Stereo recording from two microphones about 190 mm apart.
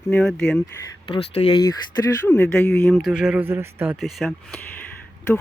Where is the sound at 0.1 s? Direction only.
5° left (ahead or behind).